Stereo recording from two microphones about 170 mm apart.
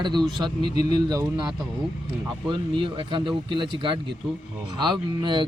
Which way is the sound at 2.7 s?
30° right (ahead or behind).